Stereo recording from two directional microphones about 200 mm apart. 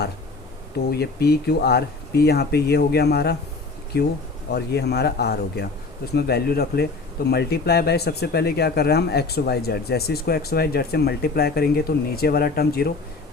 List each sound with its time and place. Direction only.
0.9 s speech: 55° left (ahead or behind)